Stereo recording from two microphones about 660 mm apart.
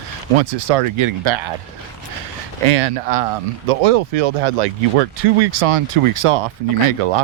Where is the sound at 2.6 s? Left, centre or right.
Right.